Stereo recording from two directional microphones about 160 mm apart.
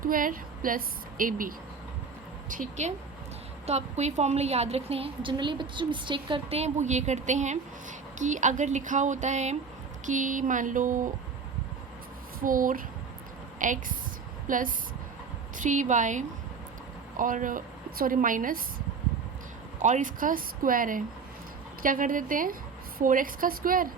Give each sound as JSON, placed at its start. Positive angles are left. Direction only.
{"t": 0.0, "sound": "a woman's voice", "side_deg": -60}
{"t": 12.4, "sound": "a woman's voice", "side_deg": -60}
{"t": 19.8, "sound": "a woman's voice", "side_deg": -50}